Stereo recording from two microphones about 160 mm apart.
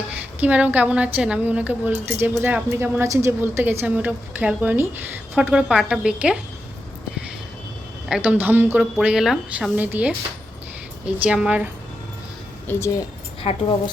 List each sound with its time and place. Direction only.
0.3 s a woman's voice: 10° right (ahead or behind)
8.0 s a woman's voice: 5° right (ahead or behind)
12.6 s speech: 15° left (ahead or behind)
13.4 s speech: 35° left (ahead or behind)